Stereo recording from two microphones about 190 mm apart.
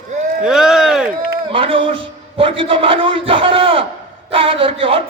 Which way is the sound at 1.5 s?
30° right (ahead or behind).